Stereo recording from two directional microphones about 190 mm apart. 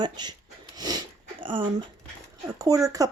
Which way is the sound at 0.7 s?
20° right (ahead or behind).